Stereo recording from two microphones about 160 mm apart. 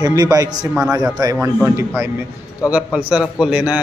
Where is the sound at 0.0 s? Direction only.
25° right (ahead or behind).